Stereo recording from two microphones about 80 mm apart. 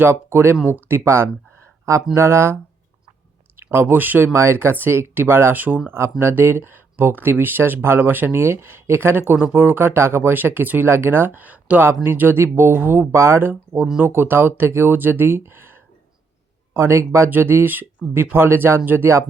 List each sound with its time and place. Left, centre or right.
0.0 s speech: right
3.6 s speech: right